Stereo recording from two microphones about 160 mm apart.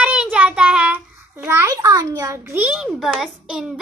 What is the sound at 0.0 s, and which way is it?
Child singing, 5° right (ahead or behind).